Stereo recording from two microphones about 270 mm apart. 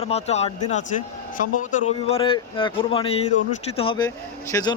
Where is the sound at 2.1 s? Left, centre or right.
Centre.